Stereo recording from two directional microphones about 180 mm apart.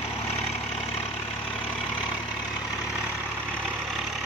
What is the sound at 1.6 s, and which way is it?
Vehicle, 5° right (ahead or behind).